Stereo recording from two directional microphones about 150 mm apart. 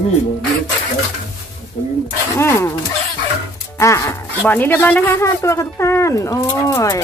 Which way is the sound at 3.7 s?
20° left (ahead or behind).